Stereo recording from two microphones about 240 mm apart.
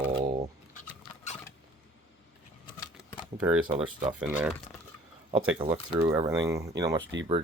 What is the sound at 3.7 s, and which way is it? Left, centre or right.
Speech, right.